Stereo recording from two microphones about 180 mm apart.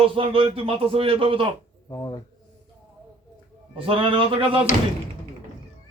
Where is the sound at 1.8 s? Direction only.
20° left (ahead or behind).